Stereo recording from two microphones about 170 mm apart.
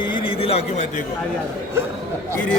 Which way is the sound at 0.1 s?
35° left (ahead or behind).